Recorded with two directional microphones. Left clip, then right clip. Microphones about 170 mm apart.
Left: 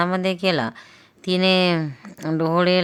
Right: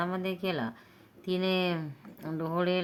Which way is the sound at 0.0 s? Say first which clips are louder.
Left 12 dB; 40° left (ahead or behind).